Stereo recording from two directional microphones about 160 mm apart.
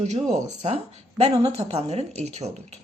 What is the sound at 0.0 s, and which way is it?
A woman's voice, 45° right (ahead or behind).